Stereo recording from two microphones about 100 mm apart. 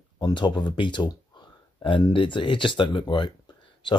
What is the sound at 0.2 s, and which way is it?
A man's voice, 50° left (ahead or behind).